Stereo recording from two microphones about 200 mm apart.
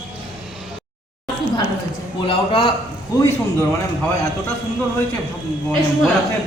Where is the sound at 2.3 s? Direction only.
25° left (ahead or behind).